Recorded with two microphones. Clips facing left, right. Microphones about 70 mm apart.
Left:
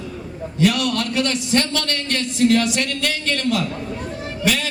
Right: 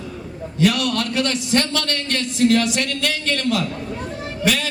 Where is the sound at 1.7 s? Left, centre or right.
Left.